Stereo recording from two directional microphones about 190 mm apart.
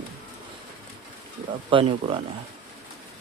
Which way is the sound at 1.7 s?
30° right (ahead or behind).